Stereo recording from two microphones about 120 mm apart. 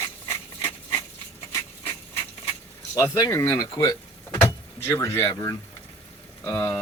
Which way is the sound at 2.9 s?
25° left (ahead or behind).